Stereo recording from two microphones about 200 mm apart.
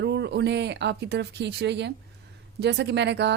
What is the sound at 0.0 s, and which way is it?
Speech, 60° right (ahead or behind).